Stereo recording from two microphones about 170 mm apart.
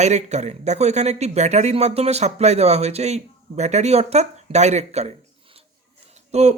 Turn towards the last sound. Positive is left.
turn(degrees=-40)  # may be behind; listen again after turning